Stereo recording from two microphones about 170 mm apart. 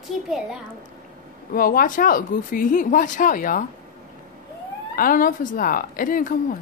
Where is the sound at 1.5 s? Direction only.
55° left (ahead or behind).